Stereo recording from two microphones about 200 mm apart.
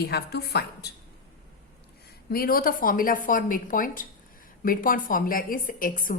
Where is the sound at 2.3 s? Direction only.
45° left (ahead or behind).